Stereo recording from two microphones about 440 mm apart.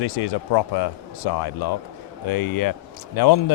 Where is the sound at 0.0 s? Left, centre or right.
Left.